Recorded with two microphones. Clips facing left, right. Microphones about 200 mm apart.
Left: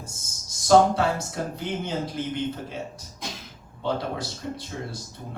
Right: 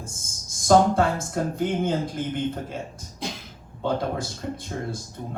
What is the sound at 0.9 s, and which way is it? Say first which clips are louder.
Mantra: right 2 dB; 50° right (ahead or behind).